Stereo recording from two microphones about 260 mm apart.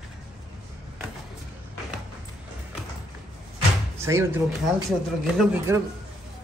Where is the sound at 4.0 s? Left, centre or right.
Centre.